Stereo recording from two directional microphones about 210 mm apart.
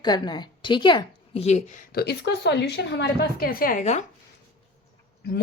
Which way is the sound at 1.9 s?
50° left (ahead or behind).